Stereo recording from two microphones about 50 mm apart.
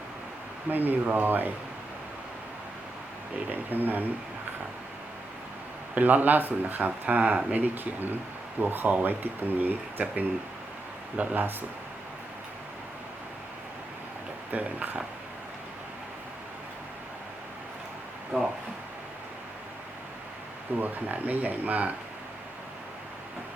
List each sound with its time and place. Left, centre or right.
0.7 s speech: right
3.5 s speech: right
5.9 s speech: right
14.5 s speech: right
18.3 s speech: right
20.7 s speech: right